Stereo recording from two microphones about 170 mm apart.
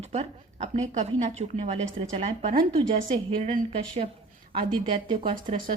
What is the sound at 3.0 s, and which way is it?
Speech, 55° right (ahead or behind).